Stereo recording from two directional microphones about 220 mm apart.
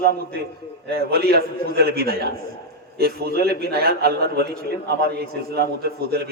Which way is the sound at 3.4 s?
45° right (ahead or behind).